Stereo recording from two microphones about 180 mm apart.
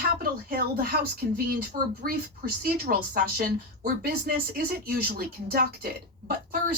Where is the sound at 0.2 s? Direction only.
55° right (ahead or behind).